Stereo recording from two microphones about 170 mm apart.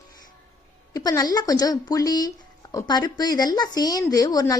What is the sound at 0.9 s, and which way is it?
A woman's voice, 20° left (ahead or behind).